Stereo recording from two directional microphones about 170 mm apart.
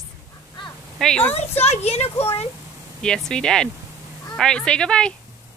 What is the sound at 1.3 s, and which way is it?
Speech, 40° left (ahead or behind).